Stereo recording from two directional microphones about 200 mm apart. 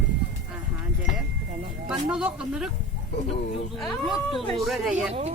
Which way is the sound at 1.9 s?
5° right (ahead or behind).